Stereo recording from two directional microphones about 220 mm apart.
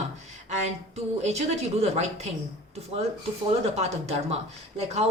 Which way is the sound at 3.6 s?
30° right (ahead or behind).